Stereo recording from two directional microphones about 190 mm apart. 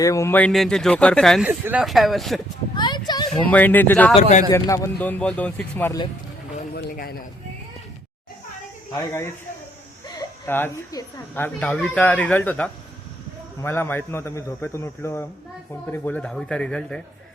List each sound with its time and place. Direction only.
0.0 s speech: 15° left (ahead or behind)
1.5 s speech: 10° right (ahead or behind)
2.7 s a sound: 25° left (ahead or behind)
3.5 s speech: 10° left (ahead or behind)
4.1 s speech: 35° left (ahead or behind)
4.4 s speech: 20° left (ahead or behind)
6.7 s a man's voice: 55° left (ahead or behind)
9.0 s speech: 15° left (ahead or behind)